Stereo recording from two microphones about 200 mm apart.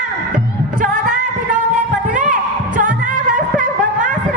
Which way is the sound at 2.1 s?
40° right (ahead or behind).